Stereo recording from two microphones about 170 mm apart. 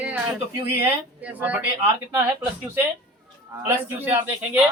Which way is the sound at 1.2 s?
10° right (ahead or behind).